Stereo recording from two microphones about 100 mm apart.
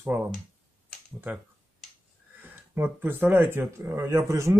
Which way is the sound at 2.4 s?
20° right (ahead or behind).